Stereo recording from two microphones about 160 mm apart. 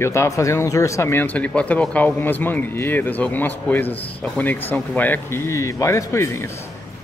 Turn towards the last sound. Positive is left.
turn(degrees=15)  # may be behind; listen again after turning